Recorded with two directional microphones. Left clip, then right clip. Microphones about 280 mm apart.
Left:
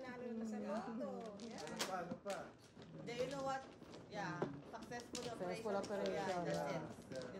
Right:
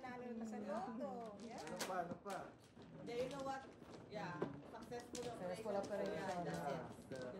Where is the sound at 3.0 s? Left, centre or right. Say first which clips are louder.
Left 2 dB; centre.